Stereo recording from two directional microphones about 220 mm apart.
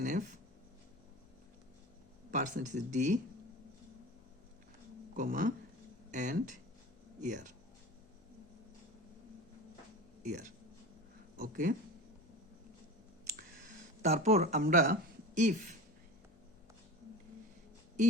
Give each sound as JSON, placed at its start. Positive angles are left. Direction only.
{"t": 0.0, "sound": "speech", "side_deg": -35}
{"t": 2.3, "sound": "speech", "side_deg": -35}
{"t": 5.1, "sound": "speech", "side_deg": -35}
{"t": 10.2, "sound": "speech", "side_deg": -35}
{"t": 14.0, "sound": "speech", "side_deg": -30}